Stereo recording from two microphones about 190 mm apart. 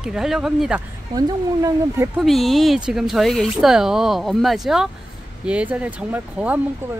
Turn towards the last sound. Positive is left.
turn(degrees=-5)  # may be behind; listen again after turning